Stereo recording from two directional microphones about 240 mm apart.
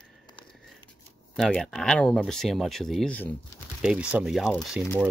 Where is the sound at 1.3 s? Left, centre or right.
Centre.